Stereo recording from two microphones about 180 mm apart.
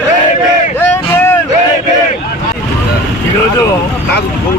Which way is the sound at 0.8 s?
10° left (ahead or behind).